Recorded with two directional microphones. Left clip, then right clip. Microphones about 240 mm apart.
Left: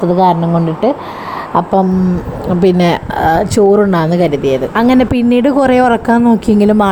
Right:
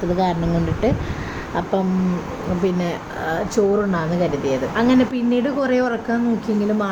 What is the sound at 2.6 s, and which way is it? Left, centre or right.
A woman's voice, left.